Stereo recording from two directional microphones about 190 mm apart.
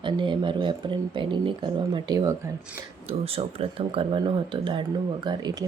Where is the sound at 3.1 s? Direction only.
30° right (ahead or behind).